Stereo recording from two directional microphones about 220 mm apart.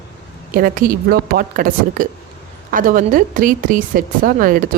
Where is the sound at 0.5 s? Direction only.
40° right (ahead or behind).